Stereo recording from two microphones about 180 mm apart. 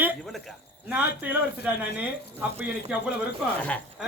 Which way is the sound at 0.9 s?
5° right (ahead or behind).